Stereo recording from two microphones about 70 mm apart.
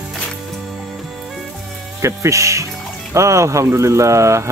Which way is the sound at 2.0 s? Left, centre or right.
Right.